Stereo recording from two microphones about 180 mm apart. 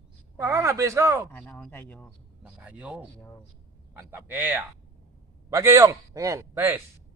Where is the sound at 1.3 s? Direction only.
10° left (ahead or behind).